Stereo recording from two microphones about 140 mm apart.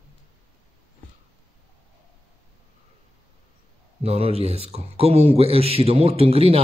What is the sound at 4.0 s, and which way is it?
A man's voice, 45° right (ahead or behind).